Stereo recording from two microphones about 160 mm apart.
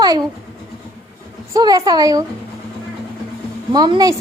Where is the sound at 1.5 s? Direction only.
20° right (ahead or behind).